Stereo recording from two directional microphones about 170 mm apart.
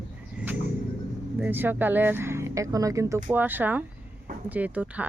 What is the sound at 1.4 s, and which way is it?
Speech, 10° right (ahead or behind).